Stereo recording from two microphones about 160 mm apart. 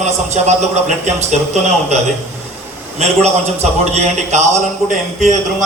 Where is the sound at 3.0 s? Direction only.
45° right (ahead or behind).